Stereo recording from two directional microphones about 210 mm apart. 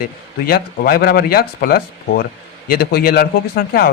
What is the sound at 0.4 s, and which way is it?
Speech, 45° left (ahead or behind).